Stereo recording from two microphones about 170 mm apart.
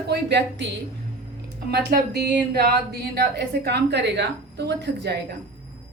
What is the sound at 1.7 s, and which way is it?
Speech, 70° right (ahead or behind).